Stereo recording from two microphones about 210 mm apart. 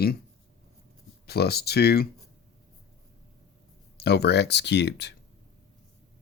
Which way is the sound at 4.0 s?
50° left (ahead or behind).